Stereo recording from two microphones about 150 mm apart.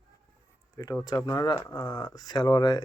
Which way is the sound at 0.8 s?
25° left (ahead or behind).